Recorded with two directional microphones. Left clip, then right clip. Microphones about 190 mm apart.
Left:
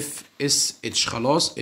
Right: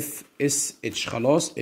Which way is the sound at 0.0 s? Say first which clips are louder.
Right 1 dB; 15° right (ahead or behind).